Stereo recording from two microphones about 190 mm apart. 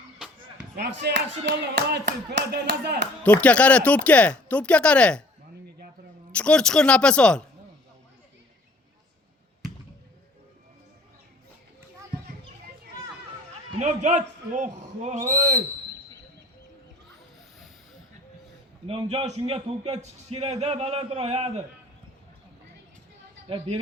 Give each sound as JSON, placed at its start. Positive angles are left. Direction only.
{"t": 1.0, "sound": "speech", "side_deg": -60}
{"t": 3.2, "sound": "speech", "side_deg": 5}
{"t": 6.3, "sound": "speech", "side_deg": 5}
{"t": 13.7, "sound": "a man's voice", "side_deg": -40}
{"t": 18.9, "sound": "a man's voice", "side_deg": -30}